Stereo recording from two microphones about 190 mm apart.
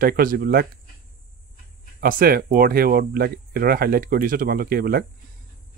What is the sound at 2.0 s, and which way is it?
Speech, 50° right (ahead or behind).